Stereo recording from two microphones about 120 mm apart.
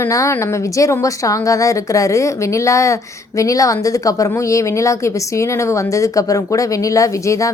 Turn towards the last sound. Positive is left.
turn(degrees=25)  # may be behind; listen again after turning